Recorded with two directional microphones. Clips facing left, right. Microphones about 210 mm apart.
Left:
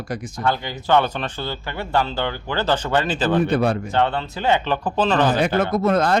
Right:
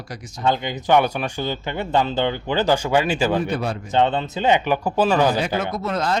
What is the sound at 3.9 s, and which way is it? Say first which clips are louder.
Speech: right 2 dB; 20° right (ahead or behind).